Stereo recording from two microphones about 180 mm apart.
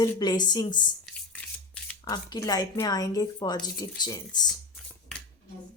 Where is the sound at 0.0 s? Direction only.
20° left (ahead or behind).